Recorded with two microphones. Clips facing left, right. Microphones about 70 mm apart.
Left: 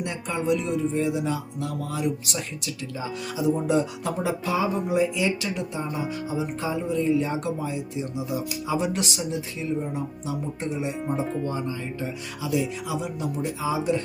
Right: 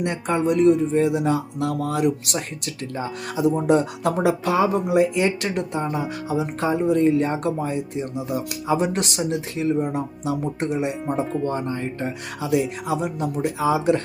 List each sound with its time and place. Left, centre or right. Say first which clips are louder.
0.0 s speech: right 6 dB; right
11.0 s speech: right 3 dB; centre
11.4 s speech: right 4 dB; right